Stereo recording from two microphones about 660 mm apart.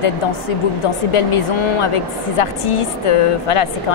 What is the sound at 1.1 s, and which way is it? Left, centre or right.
Speech, left.